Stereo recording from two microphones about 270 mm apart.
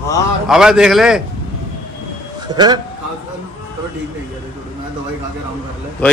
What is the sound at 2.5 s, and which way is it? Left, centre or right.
Speech, centre.